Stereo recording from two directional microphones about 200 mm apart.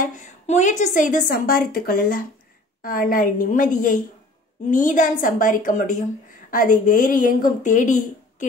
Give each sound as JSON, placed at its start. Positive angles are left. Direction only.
{"t": 0.0, "sound": "a woman's voice", "side_deg": 40}